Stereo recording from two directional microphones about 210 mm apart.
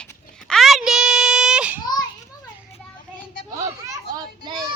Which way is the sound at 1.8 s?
20° left (ahead or behind).